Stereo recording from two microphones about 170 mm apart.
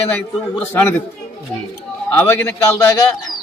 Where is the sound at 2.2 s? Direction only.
10° left (ahead or behind).